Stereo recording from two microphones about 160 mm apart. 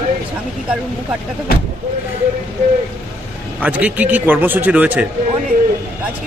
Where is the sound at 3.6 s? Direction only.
10° right (ahead or behind).